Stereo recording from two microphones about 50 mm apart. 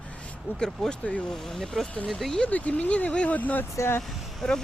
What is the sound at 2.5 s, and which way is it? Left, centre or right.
Speech, left.